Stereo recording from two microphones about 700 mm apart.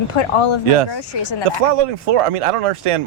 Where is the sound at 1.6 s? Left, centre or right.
Right.